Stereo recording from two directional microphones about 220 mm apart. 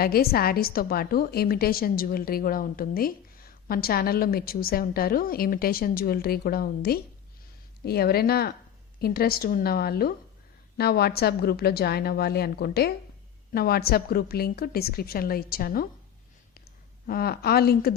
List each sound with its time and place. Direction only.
0.0 s a woman's voice: 45° left (ahead or behind)
17.1 s a woman's voice: 45° left (ahead or behind)